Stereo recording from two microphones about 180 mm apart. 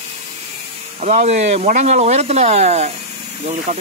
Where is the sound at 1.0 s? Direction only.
35° right (ahead or behind).